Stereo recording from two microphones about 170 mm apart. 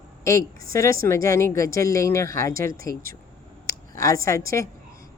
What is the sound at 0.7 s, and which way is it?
A woman's voice, 15° left (ahead or behind).